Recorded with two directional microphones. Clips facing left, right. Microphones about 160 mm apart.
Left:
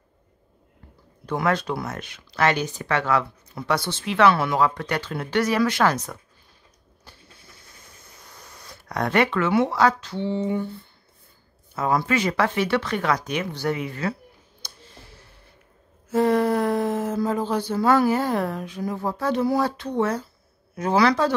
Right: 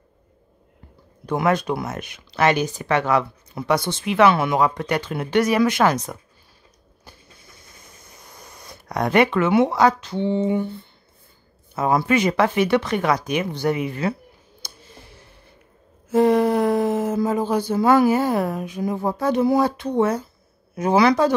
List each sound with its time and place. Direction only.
1.2 s speech: 15° right (ahead or behind)
8.1 s speech: 15° right (ahead or behind)
11.7 s speech: 20° right (ahead or behind)
16.1 s speech: 15° right (ahead or behind)